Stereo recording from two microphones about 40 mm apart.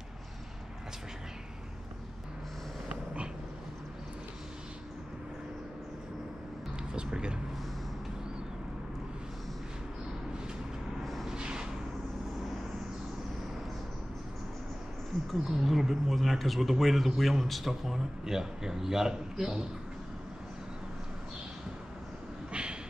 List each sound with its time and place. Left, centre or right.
6.9 s speech: right
11.2 s a sound: right
15.5 s a man's voice: centre
22.5 s vehicle: right